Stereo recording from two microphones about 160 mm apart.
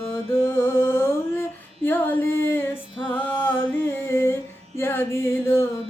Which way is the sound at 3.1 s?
10° left (ahead or behind).